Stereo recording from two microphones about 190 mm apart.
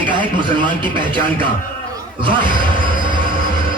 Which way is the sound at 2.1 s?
25° right (ahead or behind).